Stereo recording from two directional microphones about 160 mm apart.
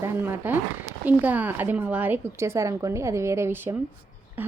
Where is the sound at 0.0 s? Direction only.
15° right (ahead or behind).